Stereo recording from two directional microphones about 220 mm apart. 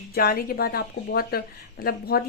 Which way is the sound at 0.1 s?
45° left (ahead or behind).